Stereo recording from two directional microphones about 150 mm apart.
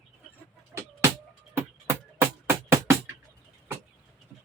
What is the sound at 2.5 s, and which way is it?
Music, 15° right (ahead or behind).